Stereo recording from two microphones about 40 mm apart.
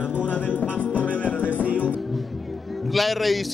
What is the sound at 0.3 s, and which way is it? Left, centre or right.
Music, left.